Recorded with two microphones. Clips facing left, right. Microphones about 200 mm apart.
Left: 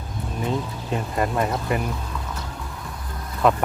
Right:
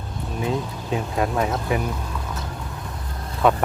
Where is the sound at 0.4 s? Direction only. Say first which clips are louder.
Right 1 dB; centre (ahead or behind).